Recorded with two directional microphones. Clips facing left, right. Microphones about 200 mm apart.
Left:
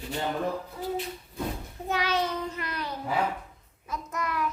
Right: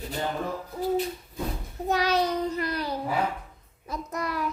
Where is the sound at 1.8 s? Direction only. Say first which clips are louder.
Right 4 dB; 40° right (ahead or behind).